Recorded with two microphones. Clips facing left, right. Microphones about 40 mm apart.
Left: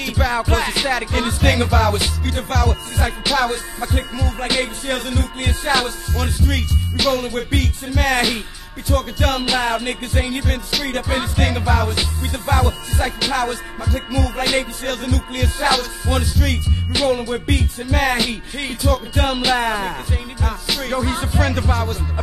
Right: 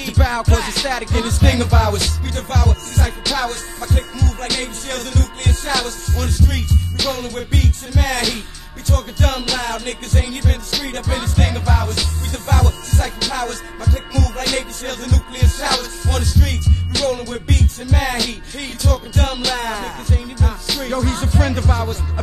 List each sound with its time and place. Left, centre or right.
0.4 s music: centre
0.9 s music: centre
6.5 s music: centre
8.1 s music: centre
9.4 s music: centre
11.0 s music: centre